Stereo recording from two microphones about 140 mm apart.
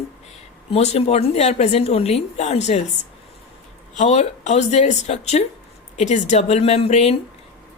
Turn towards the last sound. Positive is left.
turn(degrees=50)  # may be behind; listen again after turning